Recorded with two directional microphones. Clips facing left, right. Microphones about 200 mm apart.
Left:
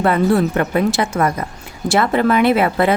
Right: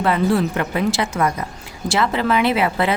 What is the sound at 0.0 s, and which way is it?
A woman's voice, 50° left (ahead or behind).